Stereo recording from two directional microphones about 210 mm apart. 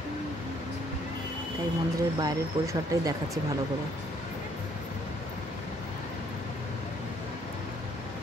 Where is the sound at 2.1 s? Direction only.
15° right (ahead or behind).